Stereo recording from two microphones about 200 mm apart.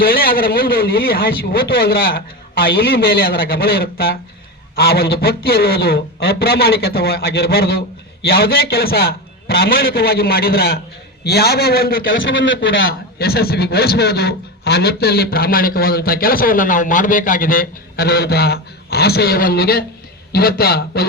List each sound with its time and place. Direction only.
0.1 s a man's voice: 45° left (ahead or behind)
12.0 s speech: 70° left (ahead or behind)
12.5 s a man's voice: 50° left (ahead or behind)